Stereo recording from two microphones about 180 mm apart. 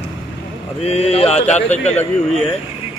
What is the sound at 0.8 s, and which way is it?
Speech, 35° left (ahead or behind).